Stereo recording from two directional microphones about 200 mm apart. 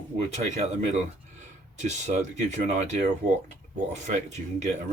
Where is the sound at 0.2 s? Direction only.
35° right (ahead or behind).